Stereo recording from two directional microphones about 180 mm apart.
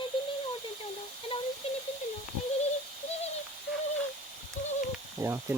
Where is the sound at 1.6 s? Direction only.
35° left (ahead or behind).